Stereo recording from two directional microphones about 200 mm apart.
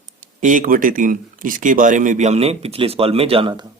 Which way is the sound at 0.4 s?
40° right (ahead or behind).